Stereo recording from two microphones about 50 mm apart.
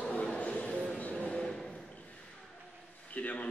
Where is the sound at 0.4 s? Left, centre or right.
Left.